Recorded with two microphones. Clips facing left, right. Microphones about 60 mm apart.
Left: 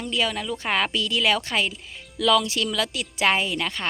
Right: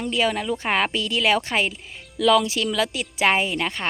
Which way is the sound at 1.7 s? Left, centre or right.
Centre.